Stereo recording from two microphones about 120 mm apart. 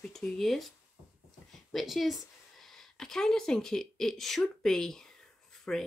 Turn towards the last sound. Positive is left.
turn(degrees=10)  # may be behind; listen again after turning